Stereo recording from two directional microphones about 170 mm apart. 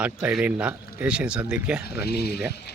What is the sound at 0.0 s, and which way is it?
Speech, 5° right (ahead or behind).